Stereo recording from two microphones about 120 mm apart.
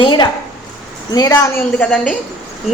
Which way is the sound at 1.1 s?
30° left (ahead or behind).